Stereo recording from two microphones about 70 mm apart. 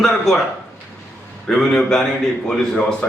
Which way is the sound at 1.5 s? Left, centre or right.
Centre.